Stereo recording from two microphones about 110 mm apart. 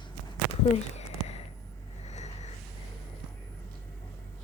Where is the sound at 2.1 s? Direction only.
90° left.